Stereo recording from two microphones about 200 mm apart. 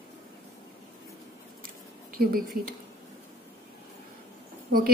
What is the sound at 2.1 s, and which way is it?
Speech, 45° right (ahead or behind).